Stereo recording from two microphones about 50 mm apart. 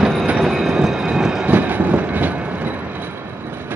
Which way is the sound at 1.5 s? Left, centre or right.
Right.